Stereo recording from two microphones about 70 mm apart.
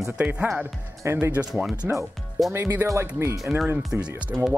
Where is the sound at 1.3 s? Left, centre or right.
Centre.